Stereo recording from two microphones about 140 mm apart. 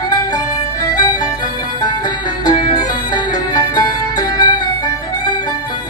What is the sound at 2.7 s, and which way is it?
Music, 30° left (ahead or behind).